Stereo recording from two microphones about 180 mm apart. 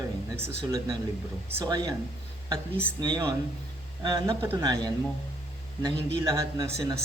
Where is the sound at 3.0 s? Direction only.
25° right (ahead or behind).